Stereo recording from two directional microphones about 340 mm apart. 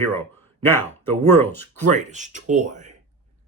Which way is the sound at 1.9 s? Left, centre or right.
Right.